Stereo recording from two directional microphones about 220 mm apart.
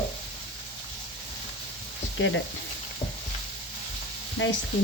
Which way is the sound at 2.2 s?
60° left (ahead or behind).